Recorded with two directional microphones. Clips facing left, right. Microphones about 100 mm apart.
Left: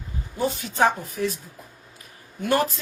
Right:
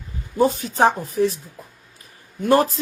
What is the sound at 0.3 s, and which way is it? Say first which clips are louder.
A woman's voice: right 5 dB; 40° right (ahead or behind).